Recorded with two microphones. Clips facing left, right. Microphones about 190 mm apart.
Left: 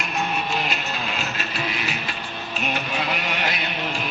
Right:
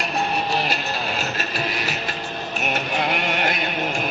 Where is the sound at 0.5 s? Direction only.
40° right (ahead or behind).